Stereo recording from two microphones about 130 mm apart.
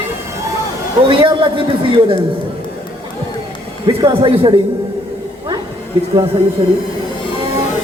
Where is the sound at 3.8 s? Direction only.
35° right (ahead or behind).